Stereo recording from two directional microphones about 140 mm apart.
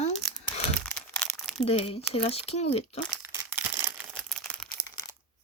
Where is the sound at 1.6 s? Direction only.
45° left (ahead or behind).